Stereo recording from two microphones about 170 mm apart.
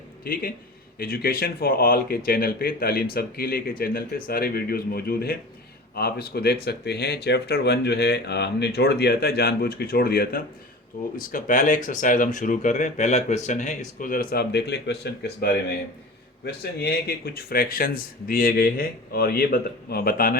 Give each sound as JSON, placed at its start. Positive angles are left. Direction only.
{"t": 0.3, "sound": "speech", "side_deg": 60}
{"t": 11.2, "sound": "speech", "side_deg": 50}
{"t": 16.8, "sound": "speech", "side_deg": 65}